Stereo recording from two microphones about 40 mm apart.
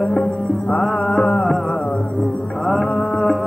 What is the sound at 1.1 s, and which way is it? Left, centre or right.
Music, left.